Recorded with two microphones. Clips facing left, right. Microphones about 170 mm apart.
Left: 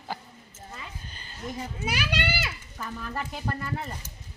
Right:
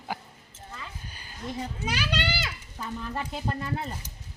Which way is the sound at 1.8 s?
10° left (ahead or behind).